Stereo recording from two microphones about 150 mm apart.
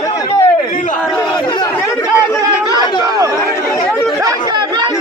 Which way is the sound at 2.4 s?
25° right (ahead or behind).